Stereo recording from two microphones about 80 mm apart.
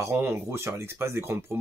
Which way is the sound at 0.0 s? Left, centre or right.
Right.